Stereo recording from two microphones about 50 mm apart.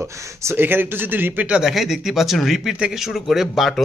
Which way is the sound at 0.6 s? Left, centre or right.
Right.